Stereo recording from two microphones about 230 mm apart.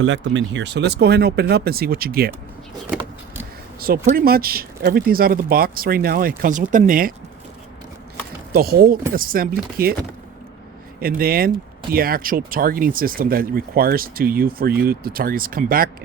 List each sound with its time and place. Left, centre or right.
0.0 s speech: right
3.8 s speech: right
8.5 s speech: right
11.0 s speech: right